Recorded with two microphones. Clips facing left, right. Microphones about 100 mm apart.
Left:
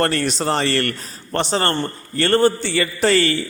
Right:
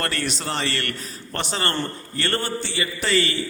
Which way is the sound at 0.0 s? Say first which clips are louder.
Left 8 dB; 35° left (ahead or behind).